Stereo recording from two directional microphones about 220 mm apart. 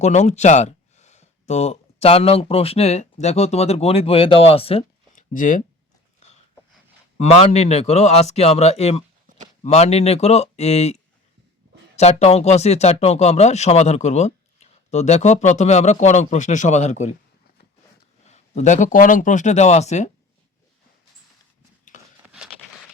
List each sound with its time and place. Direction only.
0.0 s speech: 30° left (ahead or behind)
7.2 s a man's voice: 30° left (ahead or behind)
18.3 s speech: 30° left (ahead or behind)
22.3 s a sound: 5° right (ahead or behind)